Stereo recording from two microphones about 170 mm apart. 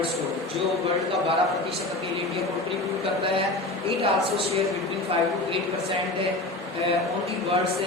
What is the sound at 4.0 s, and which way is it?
Speech, 35° right (ahead or behind).